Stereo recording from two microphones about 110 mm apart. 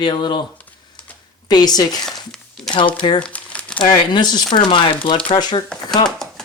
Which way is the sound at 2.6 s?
5° left (ahead or behind).